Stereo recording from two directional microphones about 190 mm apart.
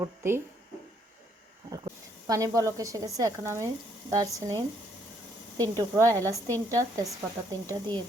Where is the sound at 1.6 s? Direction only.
15° right (ahead or behind).